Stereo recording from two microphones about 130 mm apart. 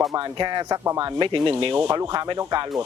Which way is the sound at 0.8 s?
20° right (ahead or behind).